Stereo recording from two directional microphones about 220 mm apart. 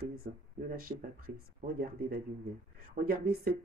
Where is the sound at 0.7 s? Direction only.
40° right (ahead or behind).